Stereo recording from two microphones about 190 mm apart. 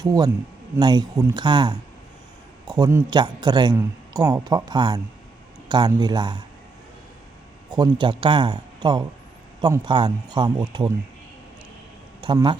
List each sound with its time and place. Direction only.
0.0 s a man's voice: 20° right (ahead or behind)
7.7 s a man's voice: 25° right (ahead or behind)
12.2 s a man's voice: 25° right (ahead or behind)